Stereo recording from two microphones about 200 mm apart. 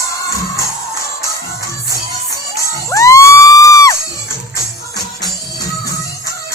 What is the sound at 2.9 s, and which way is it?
Music, 15° left (ahead or behind).